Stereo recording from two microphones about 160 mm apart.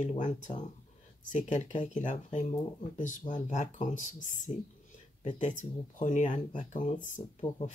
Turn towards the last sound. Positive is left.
turn(degrees=50)  # may be behind; listen again after turning